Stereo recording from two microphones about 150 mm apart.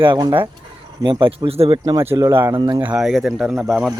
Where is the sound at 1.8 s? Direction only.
20° right (ahead or behind).